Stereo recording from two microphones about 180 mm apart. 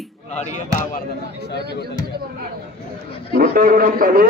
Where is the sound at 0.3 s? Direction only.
40° left (ahead or behind).